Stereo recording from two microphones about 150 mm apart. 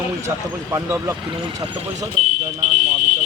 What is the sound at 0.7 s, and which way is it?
Speech, 20° right (ahead or behind).